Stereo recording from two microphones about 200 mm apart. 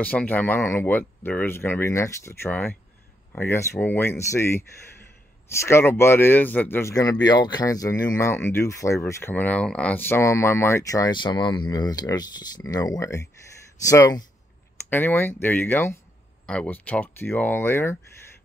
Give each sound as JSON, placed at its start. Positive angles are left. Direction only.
{"t": 0.0, "sound": "speech", "side_deg": 5}